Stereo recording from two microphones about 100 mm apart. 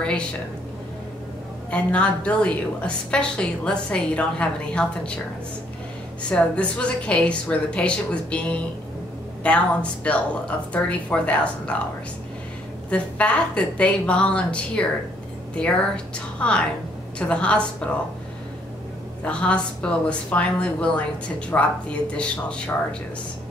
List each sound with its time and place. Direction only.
1.7 s a woman's voice: 10° left (ahead or behind)
6.2 s a woman's voice: 10° left (ahead or behind)
12.9 s a woman's voice: 10° left (ahead or behind)
19.2 s a woman's voice: 10° left (ahead or behind)